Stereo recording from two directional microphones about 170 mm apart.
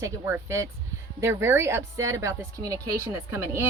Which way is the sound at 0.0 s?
15° right (ahead or behind).